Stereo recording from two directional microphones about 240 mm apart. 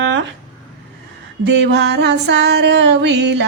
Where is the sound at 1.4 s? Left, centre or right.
Right.